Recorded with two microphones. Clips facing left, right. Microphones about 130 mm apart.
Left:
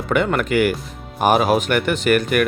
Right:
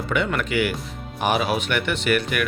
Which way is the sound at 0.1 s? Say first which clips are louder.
Left 6 dB; 45° left (ahead or behind).